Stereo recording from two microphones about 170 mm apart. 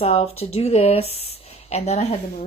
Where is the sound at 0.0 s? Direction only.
35° left (ahead or behind).